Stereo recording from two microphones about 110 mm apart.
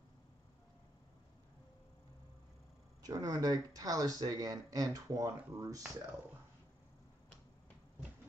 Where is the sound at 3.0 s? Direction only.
35° right (ahead or behind).